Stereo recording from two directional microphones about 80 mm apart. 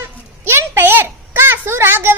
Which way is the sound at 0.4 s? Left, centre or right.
Right.